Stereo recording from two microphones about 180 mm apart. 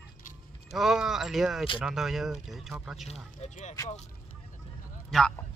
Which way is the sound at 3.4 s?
40° left (ahead or behind).